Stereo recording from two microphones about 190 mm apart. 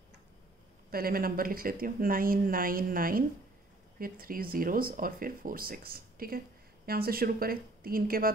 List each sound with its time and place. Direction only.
0.8 s speech: 50° right (ahead or behind)